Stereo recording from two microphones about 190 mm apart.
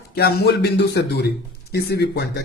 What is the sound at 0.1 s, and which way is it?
Speech, 55° left (ahead or behind).